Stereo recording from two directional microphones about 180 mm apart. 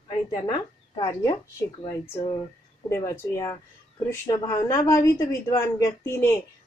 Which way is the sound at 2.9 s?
15° left (ahead or behind).